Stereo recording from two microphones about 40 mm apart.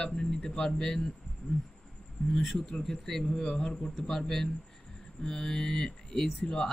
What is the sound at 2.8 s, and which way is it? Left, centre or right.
Speech, centre.